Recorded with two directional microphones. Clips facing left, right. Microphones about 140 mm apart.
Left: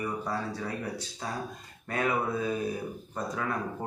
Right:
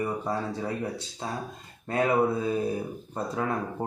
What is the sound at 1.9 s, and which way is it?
Speech, 30° right (ahead or behind).